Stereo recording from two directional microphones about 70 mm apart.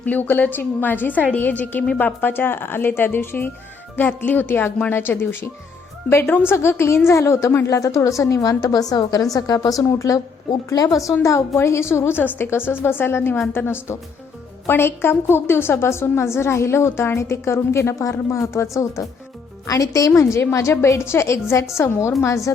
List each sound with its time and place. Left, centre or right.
0.0 s a woman's voice: left
6.5 s a woman's voice: left